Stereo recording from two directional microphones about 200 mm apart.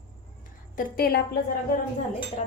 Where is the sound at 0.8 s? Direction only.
50° left (ahead or behind).